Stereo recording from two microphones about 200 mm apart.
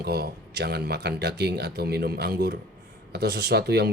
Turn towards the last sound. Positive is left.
turn(degrees=-55)  # may be behind; listen again after turning